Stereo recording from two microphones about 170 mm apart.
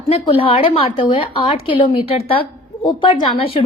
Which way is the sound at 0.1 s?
35° left (ahead or behind).